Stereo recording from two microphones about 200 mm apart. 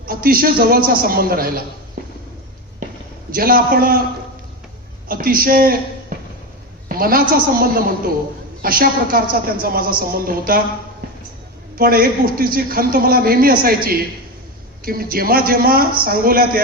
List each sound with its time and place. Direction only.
0.0 s a man's voice: 45° right (ahead or behind)
2.0 s a sound: 45° right (ahead or behind)
3.3 s a man's voice: 50° right (ahead or behind)
5.0 s a woman's voice: 45° right (ahead or behind)
11.8 s a man's voice: 45° right (ahead or behind)